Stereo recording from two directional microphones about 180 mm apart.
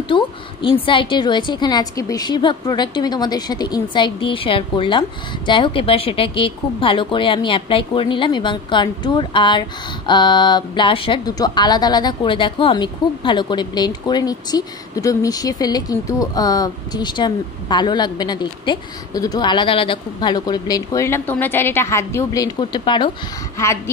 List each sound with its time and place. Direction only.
0.1 s a sound: 25° left (ahead or behind)
0.8 s a woman's voice: 30° left (ahead or behind)
23.6 s speech: 15° left (ahead or behind)